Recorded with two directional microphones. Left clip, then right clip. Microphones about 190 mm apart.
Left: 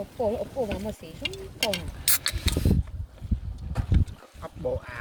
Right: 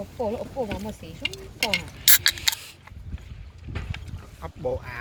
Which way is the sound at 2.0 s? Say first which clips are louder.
Right 9 dB; 35° right (ahead or behind).